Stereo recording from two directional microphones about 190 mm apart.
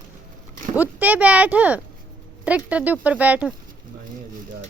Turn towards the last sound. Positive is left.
turn(degrees=-5)  # may be behind; listen again after turning